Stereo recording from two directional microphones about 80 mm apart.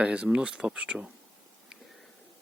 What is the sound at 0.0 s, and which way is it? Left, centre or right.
Speech, centre.